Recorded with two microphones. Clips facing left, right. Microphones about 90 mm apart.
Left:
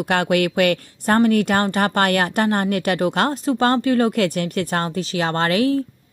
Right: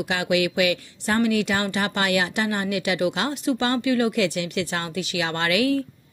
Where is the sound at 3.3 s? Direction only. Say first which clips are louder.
Left 5 dB; 40° left (ahead or behind).